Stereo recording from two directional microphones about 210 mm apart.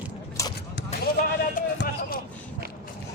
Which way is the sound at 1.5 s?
45° left (ahead or behind).